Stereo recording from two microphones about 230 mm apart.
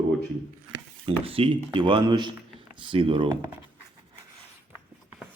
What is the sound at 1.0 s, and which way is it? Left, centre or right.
Speech, right.